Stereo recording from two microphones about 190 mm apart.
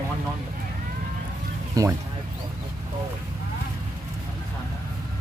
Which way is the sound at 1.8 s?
20° right (ahead or behind).